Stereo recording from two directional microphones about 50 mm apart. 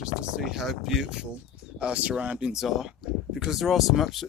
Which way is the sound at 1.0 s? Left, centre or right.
Centre.